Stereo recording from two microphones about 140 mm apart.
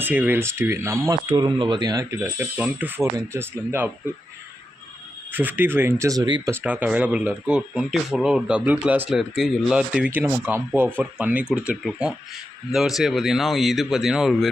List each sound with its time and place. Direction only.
0.0 s speech: 15° right (ahead or behind)
1.3 s speech: 35° right (ahead or behind)
2.2 s speech: 10° right (ahead or behind)
5.3 s speech: 15° right (ahead or behind); by 6.5 s 30° right (ahead or behind)
6.5 s speech: 15° right (ahead or behind)